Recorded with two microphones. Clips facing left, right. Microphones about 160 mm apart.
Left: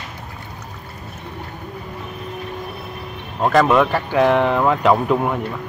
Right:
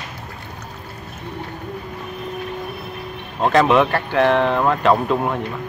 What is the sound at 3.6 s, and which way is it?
Speech, centre (ahead or behind).